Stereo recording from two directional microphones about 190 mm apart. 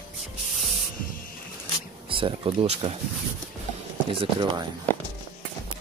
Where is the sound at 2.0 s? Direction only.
25° right (ahead or behind).